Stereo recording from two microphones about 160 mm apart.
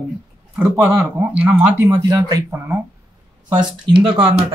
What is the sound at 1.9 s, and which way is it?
Speech, 25° right (ahead or behind).